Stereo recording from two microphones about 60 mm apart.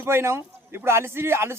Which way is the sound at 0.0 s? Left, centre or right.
Right.